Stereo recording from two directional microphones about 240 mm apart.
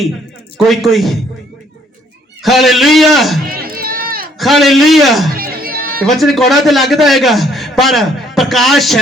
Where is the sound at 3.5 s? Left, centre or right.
Right.